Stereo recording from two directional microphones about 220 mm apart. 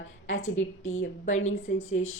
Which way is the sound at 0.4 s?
65° left (ahead or behind).